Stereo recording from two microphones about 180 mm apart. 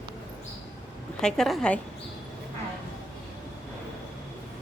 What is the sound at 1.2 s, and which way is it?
Speech, 5° left (ahead or behind).